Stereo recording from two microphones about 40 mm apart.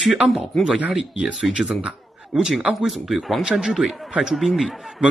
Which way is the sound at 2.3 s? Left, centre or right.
Centre.